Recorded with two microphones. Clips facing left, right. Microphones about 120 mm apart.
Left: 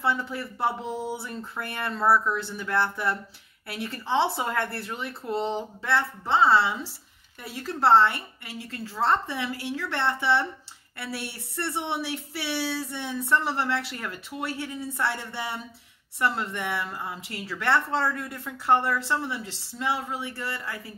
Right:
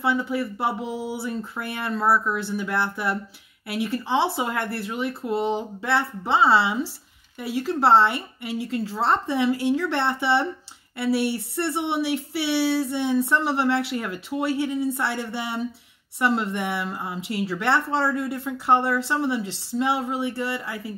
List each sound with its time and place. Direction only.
0.0 s speech: 5° right (ahead or behind)